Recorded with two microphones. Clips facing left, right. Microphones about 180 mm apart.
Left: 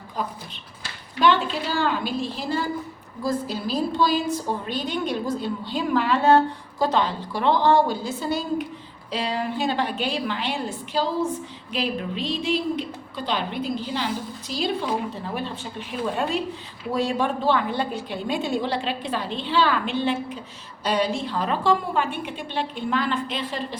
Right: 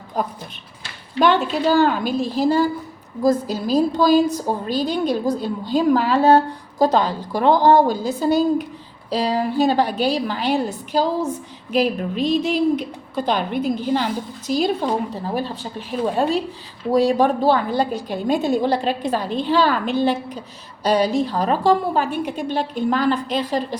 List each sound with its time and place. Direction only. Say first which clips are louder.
1.2 s a woman's voice: right 4 dB; 45° right (ahead or behind)